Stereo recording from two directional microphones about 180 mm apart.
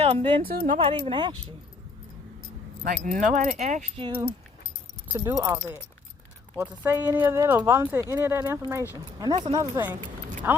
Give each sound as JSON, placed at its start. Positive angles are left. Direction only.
{"t": 0.0, "sound": "speech", "side_deg": -30}
{"t": 0.4, "sound": "speech", "side_deg": -55}
{"t": 0.8, "sound": "speech", "side_deg": -30}
{"t": 2.8, "sound": "speech", "side_deg": -50}
{"t": 5.1, "sound": "speech", "side_deg": -15}
{"t": 9.3, "sound": "speech", "side_deg": -25}
{"t": 10.4, "sound": "speech", "side_deg": -10}